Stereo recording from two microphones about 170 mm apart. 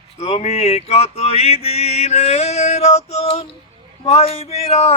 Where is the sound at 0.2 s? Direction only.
40° left (ahead or behind).